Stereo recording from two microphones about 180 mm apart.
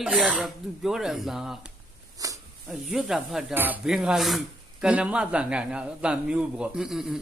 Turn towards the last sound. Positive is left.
turn(degrees=-5)  # may be behind; listen again after turning